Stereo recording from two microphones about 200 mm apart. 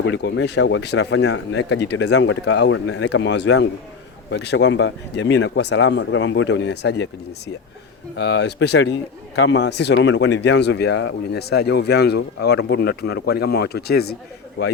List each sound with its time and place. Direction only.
0.0 s a man's voice: 60° left (ahead or behind)